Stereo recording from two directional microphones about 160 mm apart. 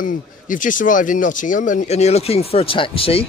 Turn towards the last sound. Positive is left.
turn(degrees=35)  # may be behind; listen again after turning